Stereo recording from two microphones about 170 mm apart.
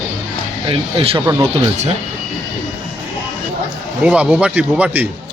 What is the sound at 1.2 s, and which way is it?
Speech, 15° right (ahead or behind).